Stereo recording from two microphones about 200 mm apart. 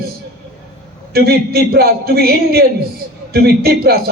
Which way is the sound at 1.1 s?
50° right (ahead or behind).